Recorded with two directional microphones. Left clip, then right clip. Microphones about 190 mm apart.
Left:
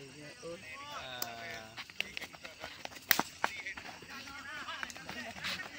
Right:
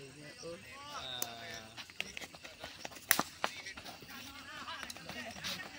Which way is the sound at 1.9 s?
5° right (ahead or behind).